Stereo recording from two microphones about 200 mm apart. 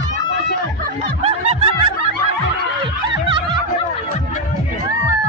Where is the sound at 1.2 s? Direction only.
30° right (ahead or behind).